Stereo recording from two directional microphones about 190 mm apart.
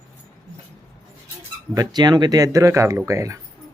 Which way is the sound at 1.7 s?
20° right (ahead or behind).